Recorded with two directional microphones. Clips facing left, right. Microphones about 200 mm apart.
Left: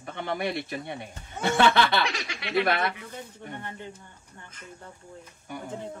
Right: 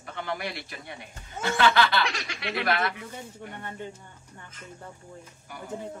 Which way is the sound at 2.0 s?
Centre (ahead or behind).